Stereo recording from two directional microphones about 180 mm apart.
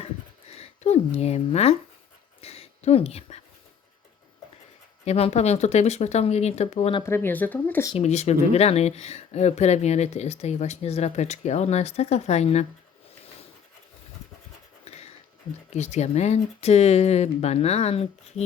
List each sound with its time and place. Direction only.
0.5 s a woman's voice: 35° left (ahead or behind)
5.0 s speech: 35° left (ahead or behind)
7.0 s speech: 15° left (ahead or behind)
7.9 s speech: 35° left (ahead or behind)
14.9 s a sound: 35° left (ahead or behind)
15.7 s speech: 40° left (ahead or behind)